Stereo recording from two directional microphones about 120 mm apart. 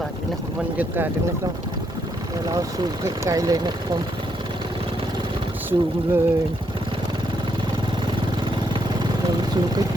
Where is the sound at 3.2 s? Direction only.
30° right (ahead or behind).